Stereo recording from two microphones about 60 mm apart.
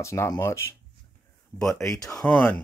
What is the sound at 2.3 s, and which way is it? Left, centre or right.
Speech, left.